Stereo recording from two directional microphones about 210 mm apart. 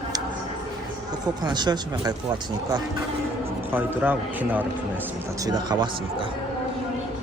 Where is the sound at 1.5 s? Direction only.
20° right (ahead or behind).